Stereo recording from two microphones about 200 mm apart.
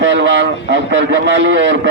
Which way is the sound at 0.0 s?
65° right (ahead or behind).